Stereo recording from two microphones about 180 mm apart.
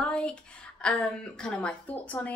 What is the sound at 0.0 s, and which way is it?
A woman's voice, 5° left (ahead or behind).